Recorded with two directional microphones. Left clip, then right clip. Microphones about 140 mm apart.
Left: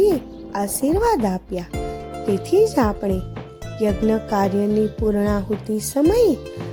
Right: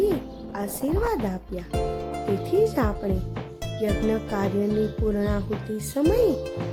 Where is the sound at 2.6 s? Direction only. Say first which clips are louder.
Left 5 dB; 40° left (ahead or behind).